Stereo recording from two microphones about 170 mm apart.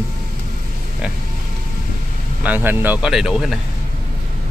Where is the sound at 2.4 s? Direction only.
10° right (ahead or behind).